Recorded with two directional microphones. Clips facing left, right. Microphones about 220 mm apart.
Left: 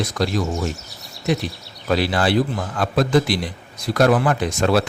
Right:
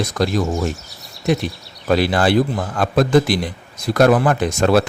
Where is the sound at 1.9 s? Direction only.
50° right (ahead or behind).